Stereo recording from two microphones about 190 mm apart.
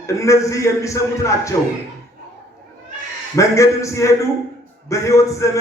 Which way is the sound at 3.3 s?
15° left (ahead or behind).